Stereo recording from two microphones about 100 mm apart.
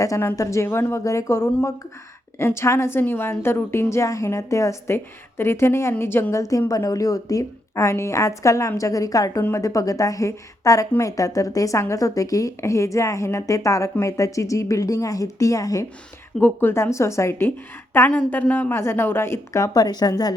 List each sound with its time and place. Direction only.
0.0 s a woman's voice: 35° left (ahead or behind)
16.4 s a woman's voice: 20° left (ahead or behind); by 20.3 s 40° left (ahead or behind)